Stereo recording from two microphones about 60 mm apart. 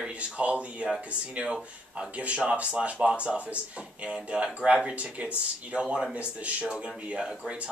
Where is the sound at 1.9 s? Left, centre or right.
Centre.